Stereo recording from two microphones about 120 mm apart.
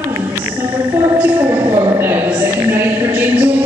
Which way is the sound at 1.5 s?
45° right (ahead or behind).